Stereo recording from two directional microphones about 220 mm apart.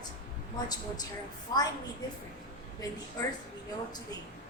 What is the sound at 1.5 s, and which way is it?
Speech, 15° left (ahead or behind).